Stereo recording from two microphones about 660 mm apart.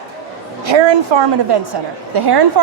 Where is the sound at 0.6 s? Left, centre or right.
Right.